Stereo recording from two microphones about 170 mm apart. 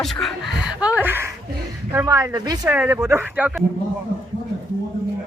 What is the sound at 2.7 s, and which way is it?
Speech, 10° right (ahead or behind).